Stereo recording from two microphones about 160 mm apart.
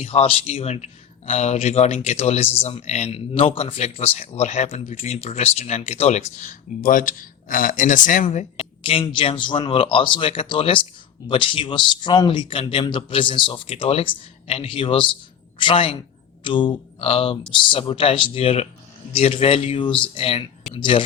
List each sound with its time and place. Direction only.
0.0 s speech: 40° left (ahead or behind)